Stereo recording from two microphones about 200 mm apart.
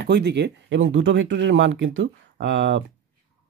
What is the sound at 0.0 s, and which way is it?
Speech, 55° right (ahead or behind).